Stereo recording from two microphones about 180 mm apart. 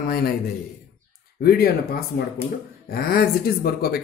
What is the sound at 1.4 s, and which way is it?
Speech, 60° left (ahead or behind).